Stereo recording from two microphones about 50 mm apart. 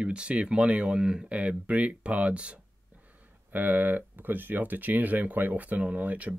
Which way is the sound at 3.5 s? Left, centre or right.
Right.